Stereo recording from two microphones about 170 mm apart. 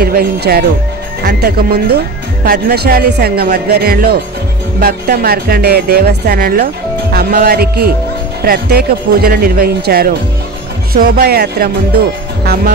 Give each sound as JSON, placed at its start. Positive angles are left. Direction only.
{"t": 0.0, "sound": "speech", "side_deg": -60}